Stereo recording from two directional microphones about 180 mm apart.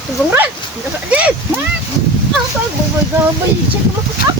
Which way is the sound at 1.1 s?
5° right (ahead or behind).